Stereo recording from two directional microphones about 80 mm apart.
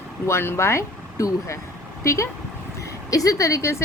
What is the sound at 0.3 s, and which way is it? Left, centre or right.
A woman's voice, left.